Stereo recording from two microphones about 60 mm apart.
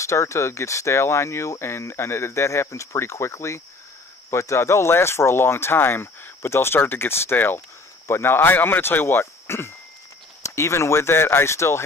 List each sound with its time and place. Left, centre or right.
0.0 s speech: left